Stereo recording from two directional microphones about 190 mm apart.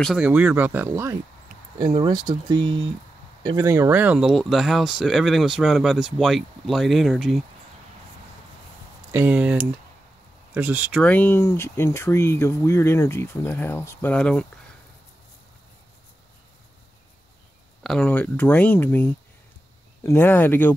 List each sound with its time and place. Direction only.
0.0 s speech: 5° right (ahead or behind)
2.0 s speech: 25° right (ahead or behind); by 7.4 s centre (ahead or behind)
9.1 s speech: 10° right (ahead or behind)
11.0 s speech: 10° left (ahead or behind)
17.8 s speech: 5° left (ahead or behind)